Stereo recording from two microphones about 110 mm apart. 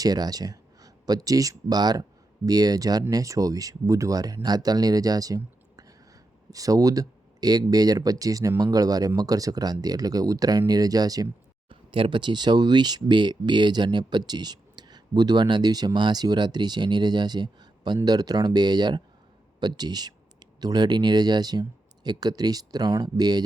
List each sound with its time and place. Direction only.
0.0 s speech: 35° right (ahead or behind)
11.7 s speech: 50° right (ahead or behind)